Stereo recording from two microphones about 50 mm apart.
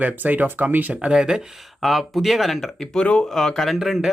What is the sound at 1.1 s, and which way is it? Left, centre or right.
Speech, centre.